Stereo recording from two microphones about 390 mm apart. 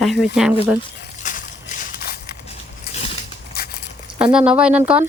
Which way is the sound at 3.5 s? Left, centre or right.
Left.